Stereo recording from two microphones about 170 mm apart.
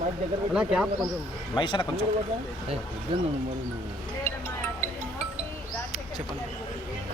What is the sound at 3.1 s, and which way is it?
Speech, 30° right (ahead or behind).